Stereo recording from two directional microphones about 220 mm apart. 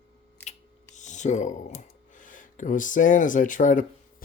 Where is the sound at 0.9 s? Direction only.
35° left (ahead or behind).